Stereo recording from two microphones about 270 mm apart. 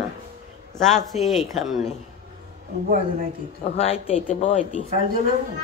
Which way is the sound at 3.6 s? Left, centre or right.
Left.